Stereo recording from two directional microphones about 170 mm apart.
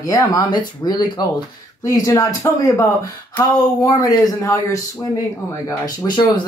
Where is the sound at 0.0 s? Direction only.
20° left (ahead or behind).